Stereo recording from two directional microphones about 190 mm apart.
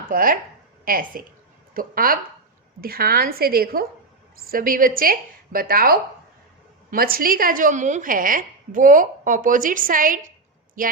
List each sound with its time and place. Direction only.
0.0 s a woman's voice: 45° right (ahead or behind)